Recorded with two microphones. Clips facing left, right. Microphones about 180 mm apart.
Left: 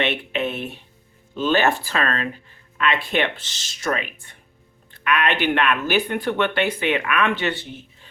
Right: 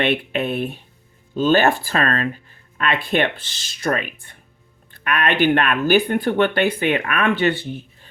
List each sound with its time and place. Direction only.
0.0 s speech: 40° right (ahead or behind)